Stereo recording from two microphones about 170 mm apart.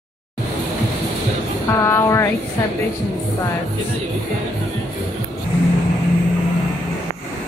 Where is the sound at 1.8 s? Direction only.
15° left (ahead or behind).